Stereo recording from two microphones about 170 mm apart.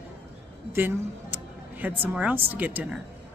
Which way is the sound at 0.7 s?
10° right (ahead or behind).